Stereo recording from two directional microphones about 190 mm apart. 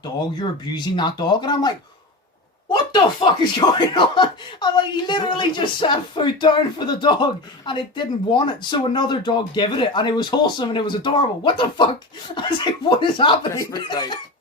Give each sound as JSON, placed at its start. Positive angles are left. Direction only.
{"t": 0.8, "sound": "speech", "side_deg": 25}
{"t": 2.9, "sound": "speech", "side_deg": 25}